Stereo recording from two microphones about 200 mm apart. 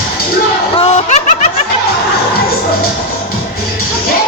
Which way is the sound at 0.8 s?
35° left (ahead or behind).